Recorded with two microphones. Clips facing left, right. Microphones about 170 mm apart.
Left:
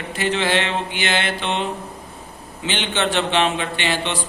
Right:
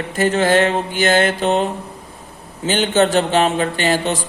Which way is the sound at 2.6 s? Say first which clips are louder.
Right 7 dB; 40° right (ahead or behind).